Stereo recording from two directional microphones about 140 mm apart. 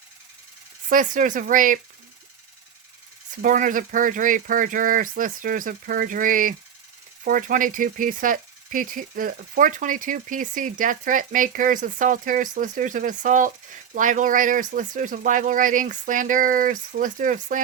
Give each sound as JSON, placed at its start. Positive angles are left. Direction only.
{"t": 0.9, "sound": "speech", "side_deg": -75}
{"t": 3.4, "sound": "speech", "side_deg": -70}